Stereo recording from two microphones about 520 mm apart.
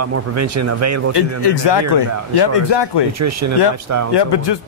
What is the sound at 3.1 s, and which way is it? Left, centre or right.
Speech, right.